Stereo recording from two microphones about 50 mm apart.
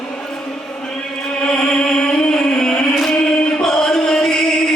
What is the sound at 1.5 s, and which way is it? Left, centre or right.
Music, centre.